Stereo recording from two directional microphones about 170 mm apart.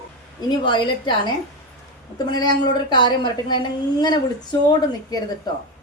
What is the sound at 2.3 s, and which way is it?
A woman's voice, 25° left (ahead or behind).